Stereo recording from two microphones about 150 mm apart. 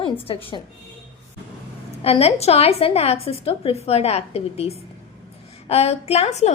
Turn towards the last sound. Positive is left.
turn(degrees=45)  # may be behind; listen again after turning